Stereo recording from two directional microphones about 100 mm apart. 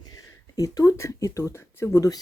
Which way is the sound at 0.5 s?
35° left (ahead or behind).